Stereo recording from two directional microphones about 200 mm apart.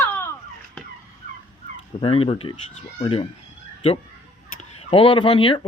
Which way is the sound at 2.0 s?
25° left (ahead or behind).